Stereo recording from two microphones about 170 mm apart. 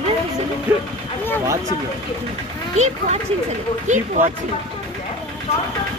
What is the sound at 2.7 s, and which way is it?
Speech, 40° right (ahead or behind).